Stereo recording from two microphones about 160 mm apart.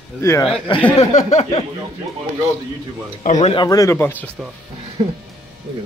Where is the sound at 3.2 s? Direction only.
45° left (ahead or behind).